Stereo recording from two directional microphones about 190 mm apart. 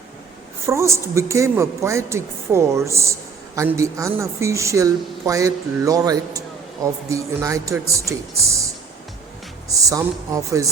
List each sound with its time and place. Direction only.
0.6 s a woman's voice: 15° right (ahead or behind)
9.8 s a woman's voice: 15° right (ahead or behind)